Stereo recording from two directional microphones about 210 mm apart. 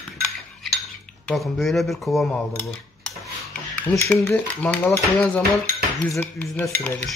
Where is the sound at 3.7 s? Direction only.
10° left (ahead or behind).